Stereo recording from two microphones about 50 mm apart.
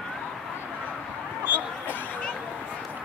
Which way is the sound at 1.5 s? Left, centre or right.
Left.